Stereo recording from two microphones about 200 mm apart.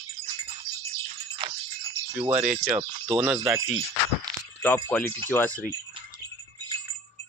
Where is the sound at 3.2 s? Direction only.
5° right (ahead or behind).